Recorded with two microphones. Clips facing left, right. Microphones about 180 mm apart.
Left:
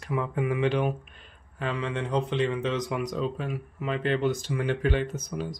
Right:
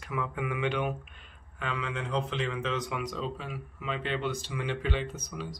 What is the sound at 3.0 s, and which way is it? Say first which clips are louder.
Speech: left 5 dB; 50° left (ahead or behind).